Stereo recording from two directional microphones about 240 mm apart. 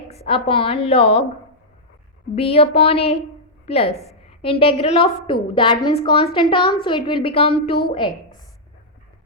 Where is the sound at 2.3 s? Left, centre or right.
Left.